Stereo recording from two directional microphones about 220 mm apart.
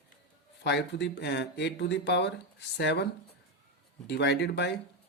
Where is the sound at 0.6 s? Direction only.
50° left (ahead or behind).